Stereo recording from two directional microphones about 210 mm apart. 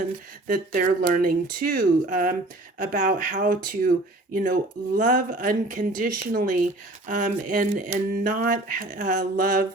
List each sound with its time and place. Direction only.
0.4 s speech: 40° right (ahead or behind)